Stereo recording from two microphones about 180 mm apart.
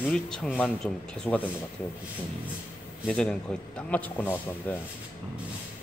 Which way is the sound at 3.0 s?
5° left (ahead or behind).